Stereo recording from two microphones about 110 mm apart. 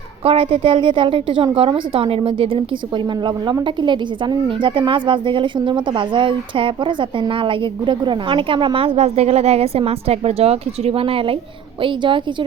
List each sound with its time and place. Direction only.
0.3 s a woman's voice: 60° right (ahead or behind)